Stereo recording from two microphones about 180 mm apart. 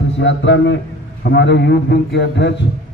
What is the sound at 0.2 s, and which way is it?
Speech, 90° left.